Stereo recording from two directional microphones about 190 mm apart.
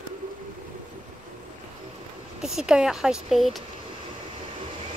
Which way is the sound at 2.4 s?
5° right (ahead or behind).